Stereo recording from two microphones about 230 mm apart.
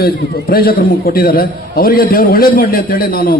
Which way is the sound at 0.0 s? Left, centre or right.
Left.